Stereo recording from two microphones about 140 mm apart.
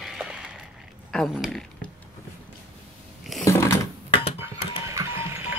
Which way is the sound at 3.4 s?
20° left (ahead or behind).